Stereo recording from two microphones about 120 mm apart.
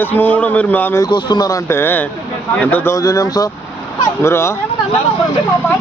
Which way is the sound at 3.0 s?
30° left (ahead or behind).